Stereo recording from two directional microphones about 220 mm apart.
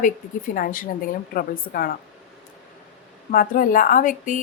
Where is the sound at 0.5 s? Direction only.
40° left (ahead or behind).